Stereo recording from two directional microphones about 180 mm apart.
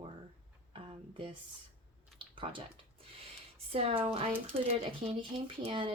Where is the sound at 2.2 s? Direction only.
30° right (ahead or behind).